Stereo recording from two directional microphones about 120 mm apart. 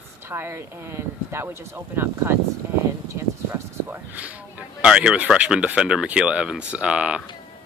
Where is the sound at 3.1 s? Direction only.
25° right (ahead or behind).